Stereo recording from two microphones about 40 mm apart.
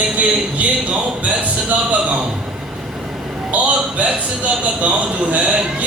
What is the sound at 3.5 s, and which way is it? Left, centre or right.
Speech, right.